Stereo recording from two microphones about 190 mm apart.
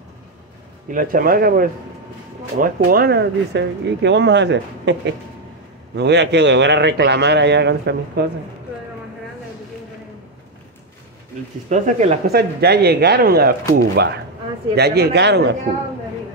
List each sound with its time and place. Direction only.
0.9 s a man's voice: 45° right (ahead or behind); by 8.3 s 65° right (ahead or behind)
11.7 s speech: 40° right (ahead or behind)
12.3 s a man's voice: 55° right (ahead or behind)